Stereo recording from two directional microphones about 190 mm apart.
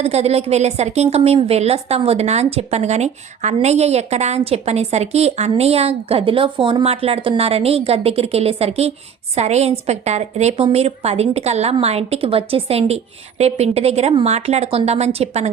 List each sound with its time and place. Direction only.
0.0 s a woman's voice: 35° right (ahead or behind)